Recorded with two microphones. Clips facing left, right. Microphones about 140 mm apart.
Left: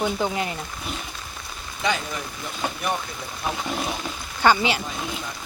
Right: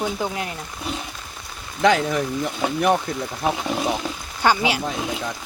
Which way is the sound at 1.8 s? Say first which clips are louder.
Right 8 dB; 75° right (ahead or behind).